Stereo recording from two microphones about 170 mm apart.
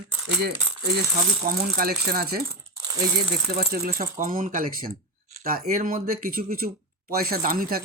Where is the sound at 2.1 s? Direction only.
60° right (ahead or behind).